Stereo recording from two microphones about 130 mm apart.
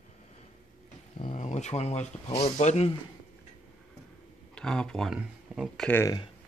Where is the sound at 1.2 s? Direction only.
70° left (ahead or behind).